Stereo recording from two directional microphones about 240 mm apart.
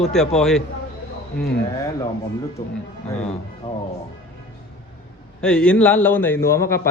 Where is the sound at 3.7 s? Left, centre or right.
Left.